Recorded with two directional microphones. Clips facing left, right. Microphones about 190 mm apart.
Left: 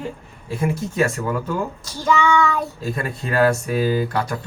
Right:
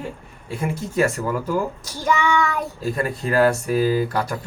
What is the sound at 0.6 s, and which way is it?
Speech, centre (ahead or behind).